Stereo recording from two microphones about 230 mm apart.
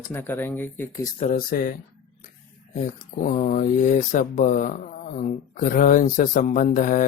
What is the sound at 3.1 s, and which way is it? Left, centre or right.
Speech, left.